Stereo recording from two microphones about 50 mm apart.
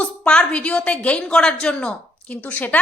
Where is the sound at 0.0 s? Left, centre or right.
Left.